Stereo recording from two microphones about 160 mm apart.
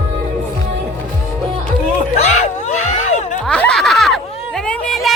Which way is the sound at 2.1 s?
45° left (ahead or behind).